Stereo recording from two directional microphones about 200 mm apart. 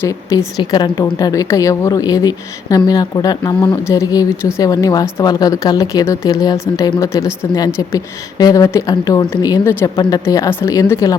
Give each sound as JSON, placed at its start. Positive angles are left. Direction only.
{"t": 0.0, "sound": "a woman's voice", "side_deg": 15}